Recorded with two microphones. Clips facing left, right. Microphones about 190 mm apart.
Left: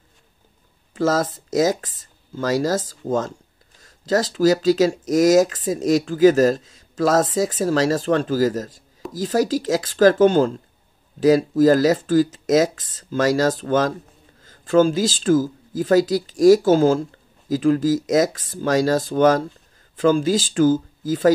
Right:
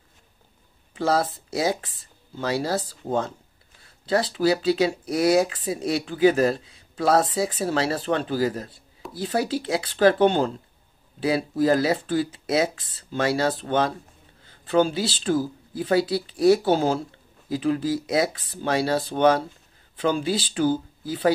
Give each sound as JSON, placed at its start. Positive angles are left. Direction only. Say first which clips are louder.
{"t": 0.9, "sound": "speech", "louder": "left 3 dB", "side_deg": 45}